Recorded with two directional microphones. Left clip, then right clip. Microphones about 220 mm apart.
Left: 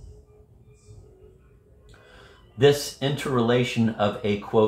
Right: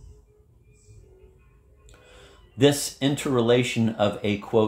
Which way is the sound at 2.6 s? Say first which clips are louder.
Left 1 dB; 45° right (ahead or behind).